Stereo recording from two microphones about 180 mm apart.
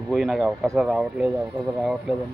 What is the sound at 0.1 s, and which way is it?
Speech, centre (ahead or behind).